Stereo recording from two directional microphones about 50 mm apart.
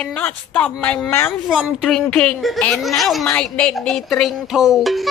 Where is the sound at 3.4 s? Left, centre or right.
Centre.